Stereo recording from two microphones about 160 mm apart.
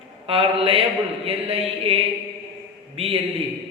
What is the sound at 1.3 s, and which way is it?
Speech, 40° right (ahead or behind).